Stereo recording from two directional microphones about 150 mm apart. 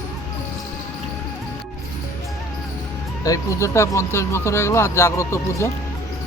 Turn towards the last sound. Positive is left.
turn(degrees=20)  # may be behind; listen again after turning